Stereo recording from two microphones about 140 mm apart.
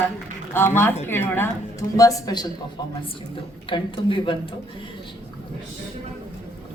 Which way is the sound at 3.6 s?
35° left (ahead or behind).